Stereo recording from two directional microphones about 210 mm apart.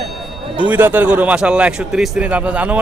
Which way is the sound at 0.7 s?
10° right (ahead or behind).